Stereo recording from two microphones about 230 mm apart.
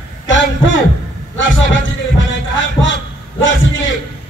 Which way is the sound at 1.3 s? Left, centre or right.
Left.